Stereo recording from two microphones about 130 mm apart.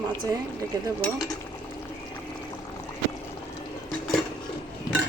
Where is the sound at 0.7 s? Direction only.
25° right (ahead or behind).